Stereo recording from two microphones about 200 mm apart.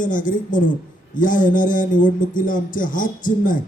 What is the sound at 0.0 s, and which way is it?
A man's voice, 40° left (ahead or behind).